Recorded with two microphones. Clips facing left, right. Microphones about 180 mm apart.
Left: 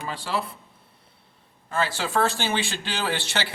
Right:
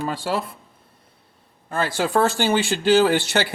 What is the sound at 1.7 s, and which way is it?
Speech, 45° right (ahead or behind).